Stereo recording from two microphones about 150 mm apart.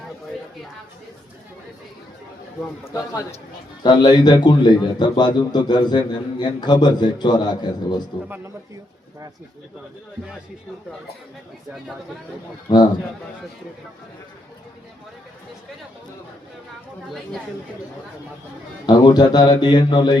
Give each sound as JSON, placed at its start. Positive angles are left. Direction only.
{"t": 2.9, "sound": "a man's voice", "side_deg": 20}
{"t": 12.6, "sound": "a man's voice", "side_deg": 30}
{"t": 18.9, "sound": "a man's voice", "side_deg": 30}